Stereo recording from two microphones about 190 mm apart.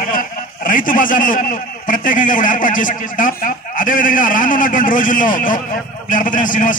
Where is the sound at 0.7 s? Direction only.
45° left (ahead or behind).